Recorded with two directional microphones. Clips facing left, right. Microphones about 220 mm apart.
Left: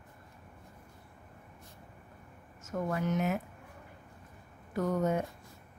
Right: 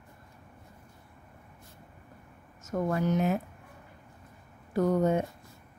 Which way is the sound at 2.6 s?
35° right (ahead or behind).